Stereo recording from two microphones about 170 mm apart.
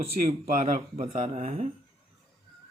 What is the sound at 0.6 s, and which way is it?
Speech, 50° right (ahead or behind).